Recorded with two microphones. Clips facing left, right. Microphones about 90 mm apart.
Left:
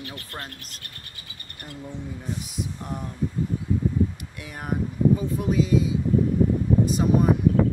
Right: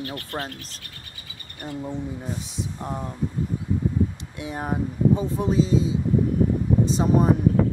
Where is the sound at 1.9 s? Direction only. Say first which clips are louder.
Left 1 dB; 30° right (ahead or behind).